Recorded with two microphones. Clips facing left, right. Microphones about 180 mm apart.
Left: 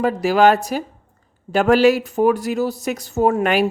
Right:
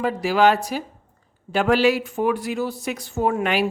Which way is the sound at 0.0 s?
45° left (ahead or behind).